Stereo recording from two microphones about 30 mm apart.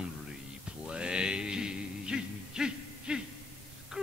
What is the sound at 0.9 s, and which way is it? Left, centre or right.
Music, right.